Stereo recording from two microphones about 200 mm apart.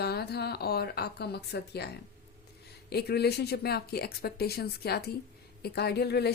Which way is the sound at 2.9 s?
55° left (ahead or behind).